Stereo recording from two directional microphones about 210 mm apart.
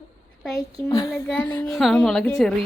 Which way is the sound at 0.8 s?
15° left (ahead or behind).